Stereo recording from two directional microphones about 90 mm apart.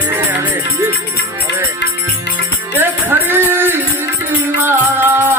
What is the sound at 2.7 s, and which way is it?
Music, 25° right (ahead or behind).